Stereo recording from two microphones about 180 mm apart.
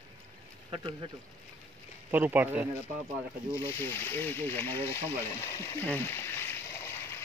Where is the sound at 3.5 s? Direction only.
15° left (ahead or behind).